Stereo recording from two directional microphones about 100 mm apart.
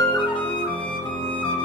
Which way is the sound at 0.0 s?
50° left (ahead or behind).